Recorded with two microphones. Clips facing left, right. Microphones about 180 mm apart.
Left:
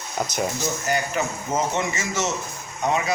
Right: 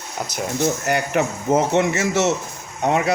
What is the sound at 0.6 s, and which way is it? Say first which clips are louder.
A man's voice: right 5 dB; 65° right (ahead or behind).